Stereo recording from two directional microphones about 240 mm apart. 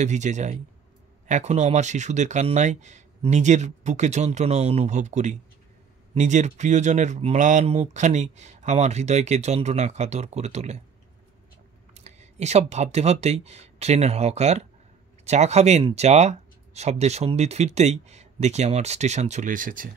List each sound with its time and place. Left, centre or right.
0.0 s speech: right
11.9 s speech: right